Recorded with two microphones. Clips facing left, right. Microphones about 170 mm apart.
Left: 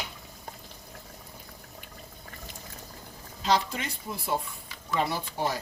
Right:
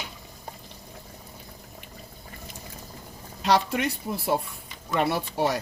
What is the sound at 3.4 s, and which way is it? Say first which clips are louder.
Speech: right 4 dB; 65° right (ahead or behind).